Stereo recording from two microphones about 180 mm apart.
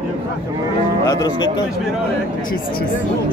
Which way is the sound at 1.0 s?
20° left (ahead or behind).